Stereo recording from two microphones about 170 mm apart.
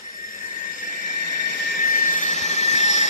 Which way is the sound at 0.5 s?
55° left (ahead or behind).